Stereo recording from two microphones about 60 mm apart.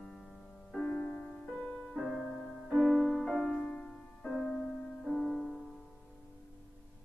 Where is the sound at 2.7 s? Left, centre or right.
Centre.